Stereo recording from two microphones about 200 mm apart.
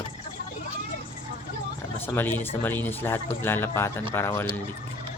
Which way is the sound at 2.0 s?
10° left (ahead or behind).